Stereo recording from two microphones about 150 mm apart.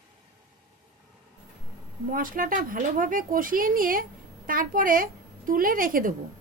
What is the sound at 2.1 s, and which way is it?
A woman's voice, 70° right (ahead or behind).